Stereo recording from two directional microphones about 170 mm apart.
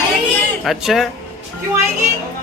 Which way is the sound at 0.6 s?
Centre (ahead or behind).